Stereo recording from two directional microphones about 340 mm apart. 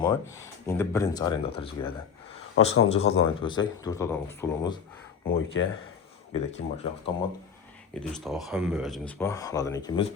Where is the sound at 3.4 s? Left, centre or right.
Centre.